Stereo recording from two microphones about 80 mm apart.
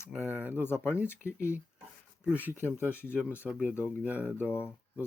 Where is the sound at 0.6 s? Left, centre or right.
Left.